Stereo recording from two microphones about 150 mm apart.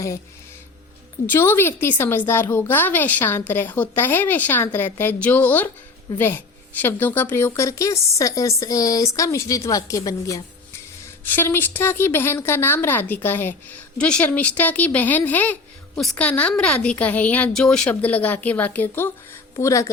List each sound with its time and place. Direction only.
1.3 s a woman's voice: 15° left (ahead or behind)